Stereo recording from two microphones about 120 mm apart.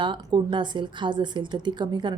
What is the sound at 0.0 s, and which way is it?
A woman's voice, 40° right (ahead or behind).